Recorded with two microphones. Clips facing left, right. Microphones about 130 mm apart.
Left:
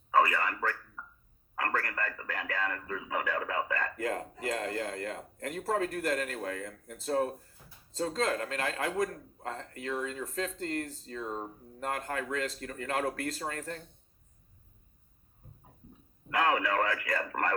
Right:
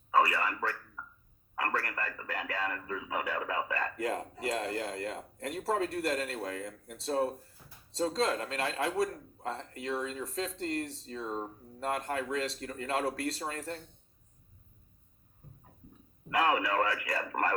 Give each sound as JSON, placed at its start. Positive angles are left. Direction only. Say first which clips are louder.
{"t": 0.1, "sound": "speech", "louder": "left 1 dB", "side_deg": -30}
{"t": 16.3, "sound": "speech", "louder": "even", "side_deg": -25}